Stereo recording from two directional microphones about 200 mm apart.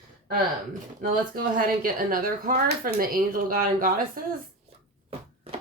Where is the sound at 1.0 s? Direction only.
45° right (ahead or behind).